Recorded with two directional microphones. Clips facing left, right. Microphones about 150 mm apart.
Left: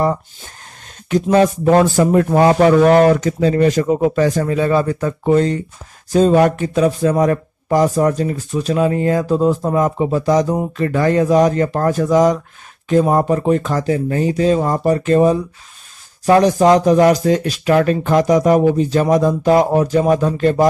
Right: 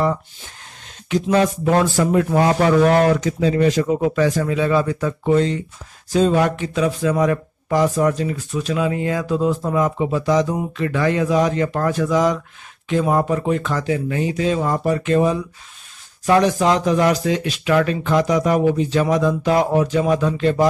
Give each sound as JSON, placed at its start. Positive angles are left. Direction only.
{"t": 1.0, "sound": "speech", "side_deg": 45}